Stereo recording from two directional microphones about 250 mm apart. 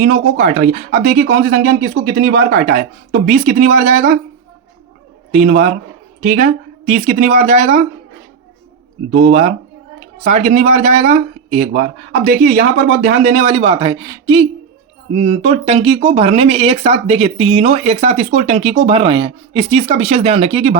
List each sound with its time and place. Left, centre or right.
0.0 s speech: right
5.3 s speech: right
6.9 s speech: right
9.1 s speech: right
11.7 s speech: right
13.3 s speech: right